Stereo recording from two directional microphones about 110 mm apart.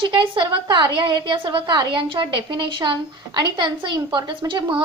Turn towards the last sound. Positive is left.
turn(degrees=-45)  # may be behind; listen again after turning